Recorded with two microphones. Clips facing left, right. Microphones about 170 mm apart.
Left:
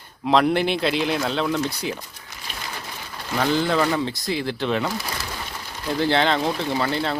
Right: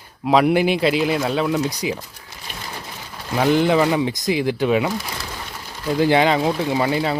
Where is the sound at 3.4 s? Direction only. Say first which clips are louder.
Right 5 dB; 15° right (ahead or behind).